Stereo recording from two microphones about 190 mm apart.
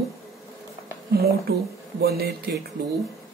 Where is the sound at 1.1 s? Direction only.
55° right (ahead or behind).